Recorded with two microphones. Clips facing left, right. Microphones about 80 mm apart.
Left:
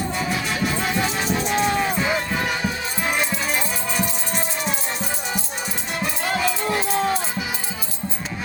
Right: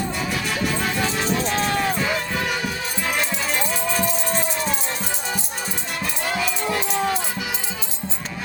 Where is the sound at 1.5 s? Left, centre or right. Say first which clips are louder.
Left 1 dB; centre.